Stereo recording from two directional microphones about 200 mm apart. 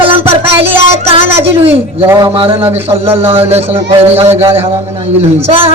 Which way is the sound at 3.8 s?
30° right (ahead or behind).